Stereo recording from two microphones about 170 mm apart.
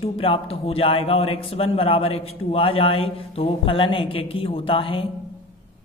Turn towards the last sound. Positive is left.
turn(degrees=30)  # may be behind; listen again after turning